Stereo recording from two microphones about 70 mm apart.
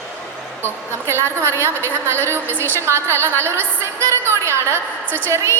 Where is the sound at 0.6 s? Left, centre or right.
Right.